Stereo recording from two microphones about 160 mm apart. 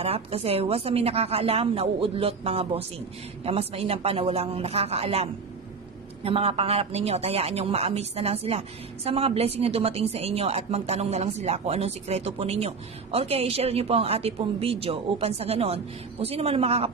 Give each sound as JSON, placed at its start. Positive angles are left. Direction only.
{"t": 0.0, "sound": "speech", "side_deg": -40}